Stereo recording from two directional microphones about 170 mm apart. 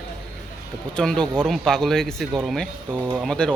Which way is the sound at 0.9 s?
5° left (ahead or behind).